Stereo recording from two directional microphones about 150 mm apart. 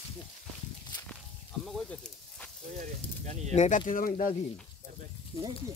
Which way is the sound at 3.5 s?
50° left (ahead or behind).